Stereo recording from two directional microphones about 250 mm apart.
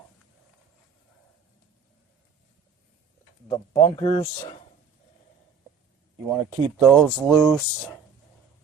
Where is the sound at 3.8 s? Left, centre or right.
Centre.